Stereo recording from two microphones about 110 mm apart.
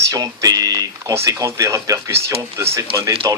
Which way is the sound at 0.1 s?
35° right (ahead or behind).